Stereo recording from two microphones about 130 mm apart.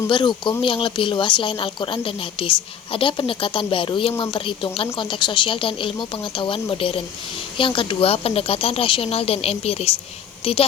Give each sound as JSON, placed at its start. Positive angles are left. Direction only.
{"t": 0.1, "sound": "speech", "side_deg": 40}